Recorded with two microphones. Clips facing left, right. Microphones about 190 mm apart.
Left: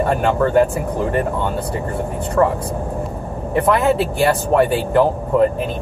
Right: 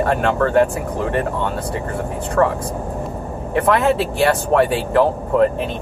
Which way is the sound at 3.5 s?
Centre (ahead or behind).